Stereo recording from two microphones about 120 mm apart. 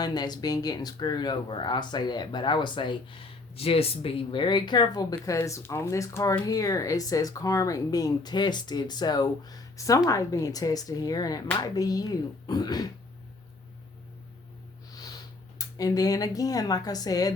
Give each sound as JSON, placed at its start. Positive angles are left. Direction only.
{"t": 0.0, "sound": "speech", "side_deg": 35}
{"t": 15.5, "sound": "speech", "side_deg": 30}